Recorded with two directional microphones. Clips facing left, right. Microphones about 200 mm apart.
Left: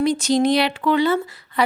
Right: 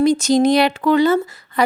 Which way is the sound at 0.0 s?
45° right (ahead or behind).